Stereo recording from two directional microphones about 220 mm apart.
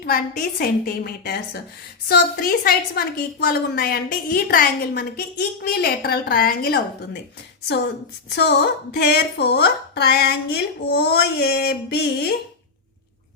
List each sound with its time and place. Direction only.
0.0 s a woman's voice: 40° left (ahead or behind)
8.3 s a woman's voice: 50° left (ahead or behind)